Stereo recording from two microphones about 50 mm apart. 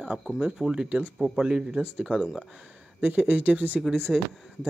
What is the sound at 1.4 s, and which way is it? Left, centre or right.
Speech, centre.